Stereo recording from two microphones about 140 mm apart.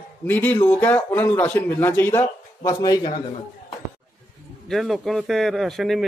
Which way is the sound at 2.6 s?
25° left (ahead or behind).